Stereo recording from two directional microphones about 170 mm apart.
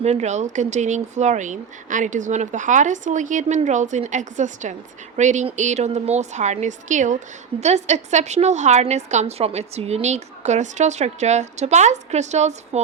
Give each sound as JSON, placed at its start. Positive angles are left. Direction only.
{"t": 0.0, "sound": "a woman's voice", "side_deg": -40}